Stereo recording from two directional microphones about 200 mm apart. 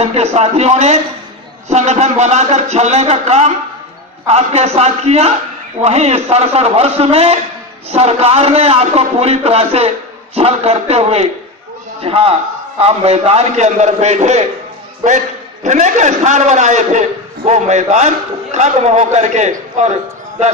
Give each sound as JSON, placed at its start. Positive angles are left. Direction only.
{"t": 0.0, "sound": "a man's voice", "side_deg": -30}
{"t": 15.6, "sound": "a man's voice", "side_deg": -35}